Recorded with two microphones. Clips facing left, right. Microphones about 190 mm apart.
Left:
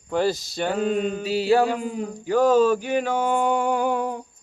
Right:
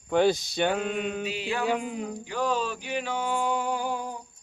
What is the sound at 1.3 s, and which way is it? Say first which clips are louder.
Music: left 10 dB; 35° left (ahead or behind).